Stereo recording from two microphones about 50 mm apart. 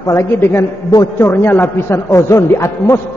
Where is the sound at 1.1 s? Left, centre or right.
Left.